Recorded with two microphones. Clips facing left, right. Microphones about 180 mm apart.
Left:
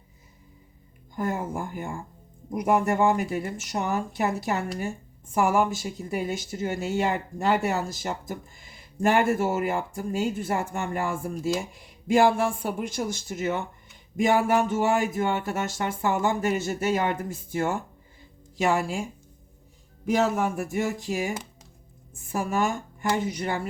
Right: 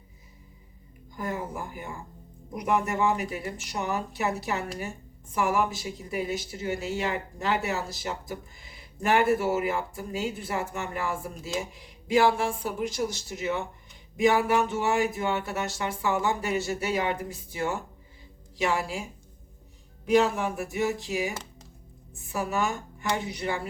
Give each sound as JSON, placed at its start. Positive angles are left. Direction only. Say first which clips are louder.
{"t": 1.1, "sound": "speech", "louder": "left 4 dB", "side_deg": 50}
{"t": 20.1, "sound": "speech", "louder": "right 1 dB", "side_deg": 45}